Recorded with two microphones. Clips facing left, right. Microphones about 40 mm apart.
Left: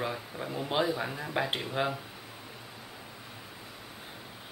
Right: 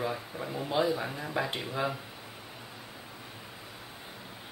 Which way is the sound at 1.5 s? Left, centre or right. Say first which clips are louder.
Left 1 dB; left.